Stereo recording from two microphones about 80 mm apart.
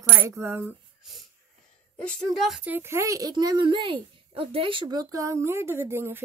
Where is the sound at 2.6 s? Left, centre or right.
Right.